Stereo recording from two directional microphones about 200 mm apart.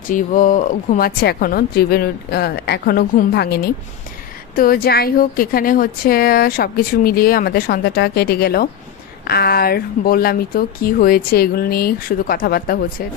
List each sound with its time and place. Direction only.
0.1 s a woman's voice: 40° left (ahead or behind)